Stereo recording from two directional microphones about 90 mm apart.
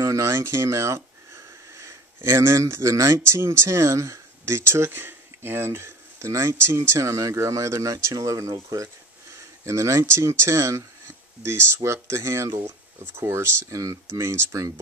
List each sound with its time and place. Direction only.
0.0 s speech: 30° right (ahead or behind)